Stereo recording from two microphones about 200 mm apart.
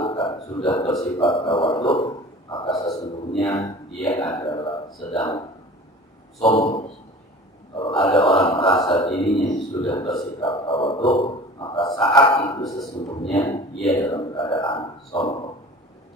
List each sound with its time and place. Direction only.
0.0 s a man's voice: 25° left (ahead or behind)
6.4 s speech: 25° left (ahead or behind)